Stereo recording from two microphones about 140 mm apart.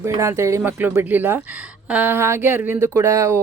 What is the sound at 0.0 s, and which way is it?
Speech, 20° right (ahead or behind).